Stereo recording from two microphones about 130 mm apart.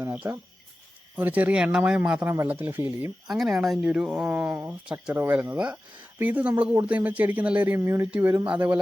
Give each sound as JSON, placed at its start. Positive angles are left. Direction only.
{"t": 0.0, "sound": "cricket", "side_deg": -15}
{"t": 1.1, "sound": "speech", "side_deg": -10}
{"t": 2.2, "sound": "speech", "side_deg": -20}
{"t": 3.2, "sound": "speech", "side_deg": 0}